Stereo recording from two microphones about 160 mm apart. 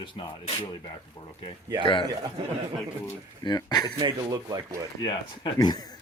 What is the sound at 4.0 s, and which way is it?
Speech, 25° right (ahead or behind).